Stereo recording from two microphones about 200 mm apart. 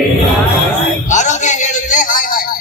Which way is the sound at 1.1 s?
35° left (ahead or behind).